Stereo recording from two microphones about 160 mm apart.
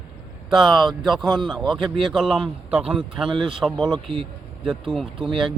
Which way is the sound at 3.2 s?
30° right (ahead or behind).